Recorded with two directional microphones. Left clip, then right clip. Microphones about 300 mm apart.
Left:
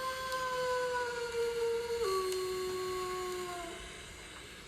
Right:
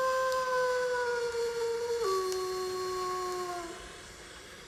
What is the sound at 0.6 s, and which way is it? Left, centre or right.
Howl, right.